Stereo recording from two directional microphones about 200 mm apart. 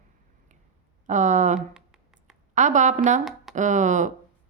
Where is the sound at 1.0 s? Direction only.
40° right (ahead or behind).